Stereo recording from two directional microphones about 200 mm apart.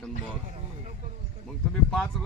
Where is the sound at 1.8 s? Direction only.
5° left (ahead or behind).